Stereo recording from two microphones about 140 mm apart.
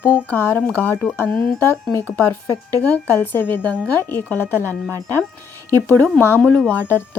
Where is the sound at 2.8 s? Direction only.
10° left (ahead or behind).